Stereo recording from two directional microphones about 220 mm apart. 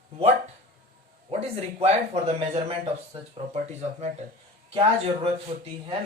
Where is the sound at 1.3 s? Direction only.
30° right (ahead or behind).